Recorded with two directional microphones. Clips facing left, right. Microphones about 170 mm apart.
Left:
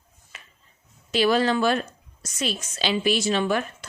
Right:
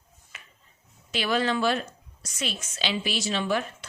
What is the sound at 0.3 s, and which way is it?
Music, 35° left (ahead or behind).